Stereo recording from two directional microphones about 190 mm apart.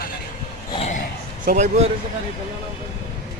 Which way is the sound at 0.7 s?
35° left (ahead or behind).